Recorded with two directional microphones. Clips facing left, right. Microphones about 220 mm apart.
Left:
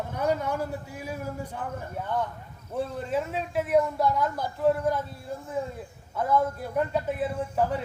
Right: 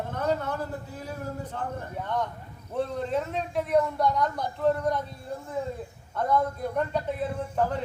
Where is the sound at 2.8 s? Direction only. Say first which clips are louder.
Right 1 dB; 5° left (ahead or behind).